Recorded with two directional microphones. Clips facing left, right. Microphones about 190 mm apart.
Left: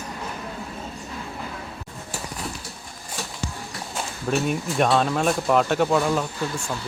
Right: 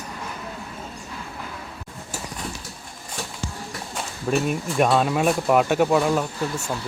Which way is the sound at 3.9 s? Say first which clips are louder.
Right 1 dB; centre (ahead or behind).